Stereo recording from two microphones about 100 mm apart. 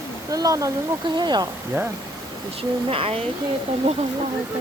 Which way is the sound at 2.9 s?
70° right (ahead or behind).